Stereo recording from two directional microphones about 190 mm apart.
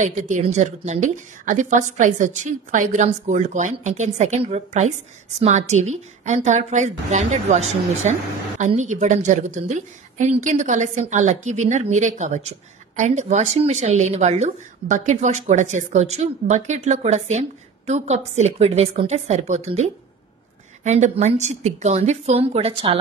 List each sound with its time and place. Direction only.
0.0 s a woman's voice: 40° right (ahead or behind)